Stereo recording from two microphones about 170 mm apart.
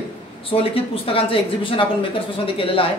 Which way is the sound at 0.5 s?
35° left (ahead or behind).